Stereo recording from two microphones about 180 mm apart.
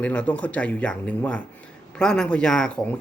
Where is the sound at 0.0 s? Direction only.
5° left (ahead or behind).